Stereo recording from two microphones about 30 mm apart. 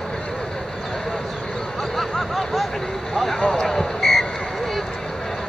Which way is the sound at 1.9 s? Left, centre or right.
Centre.